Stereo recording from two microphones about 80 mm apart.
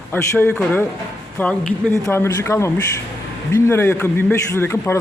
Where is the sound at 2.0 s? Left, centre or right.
Left.